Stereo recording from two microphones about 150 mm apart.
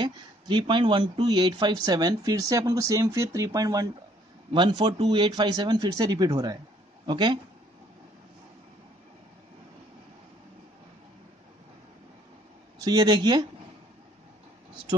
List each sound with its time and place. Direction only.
0.0 s speech: 30° right (ahead or behind)
12.8 s speech: 25° right (ahead or behind)